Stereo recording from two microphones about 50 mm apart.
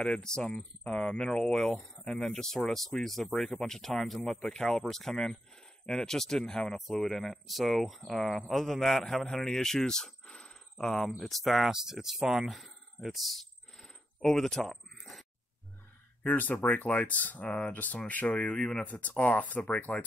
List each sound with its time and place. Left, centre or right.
0.0 s speech: centre
11.7 s a sound: centre
16.2 s speech: left
17.5 s speech: left
18.9 s speech: left